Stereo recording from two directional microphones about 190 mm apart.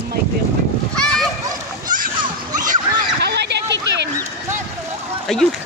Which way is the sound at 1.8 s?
45° right (ahead or behind).